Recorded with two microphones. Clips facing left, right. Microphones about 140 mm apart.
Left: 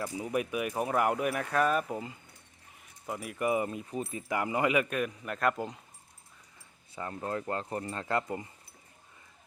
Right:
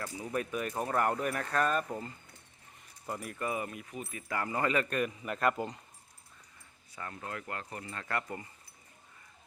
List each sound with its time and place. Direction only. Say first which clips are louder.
0.0 s a man's voice: left 4 dB; 15° left (ahead or behind)
3.3 s speech: left 8 dB; 20° left (ahead or behind)
4.3 s a man's voice: left 3 dB; 15° left (ahead or behind); by 5.8 s centre (ahead or behind)
6.9 s speech: left 6 dB; 30° left (ahead or behind)